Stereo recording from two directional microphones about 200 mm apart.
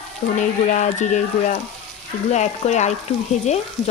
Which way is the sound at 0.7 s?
35° left (ahead or behind).